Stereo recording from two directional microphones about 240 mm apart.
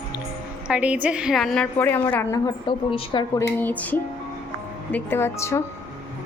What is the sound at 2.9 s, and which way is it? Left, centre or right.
Speech, centre.